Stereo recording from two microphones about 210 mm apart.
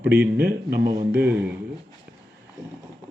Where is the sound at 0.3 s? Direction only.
50° right (ahead or behind).